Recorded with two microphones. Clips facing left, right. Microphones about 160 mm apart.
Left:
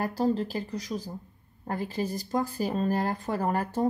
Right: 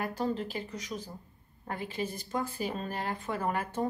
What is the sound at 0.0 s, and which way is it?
Speech, 35° left (ahead or behind).